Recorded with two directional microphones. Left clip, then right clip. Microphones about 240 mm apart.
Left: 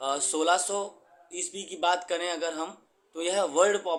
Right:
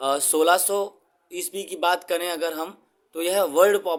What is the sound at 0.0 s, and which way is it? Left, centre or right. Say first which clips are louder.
Speech: right 7 dB; right.